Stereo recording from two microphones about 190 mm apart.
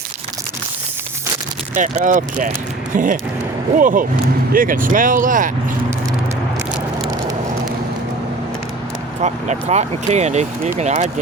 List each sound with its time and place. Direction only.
1.7 s speech: 40° right (ahead or behind)
9.2 s speech: 35° right (ahead or behind)